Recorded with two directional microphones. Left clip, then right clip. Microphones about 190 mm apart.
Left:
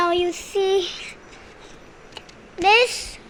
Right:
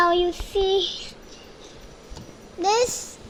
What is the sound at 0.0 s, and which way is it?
Child singing, 10° left (ahead or behind).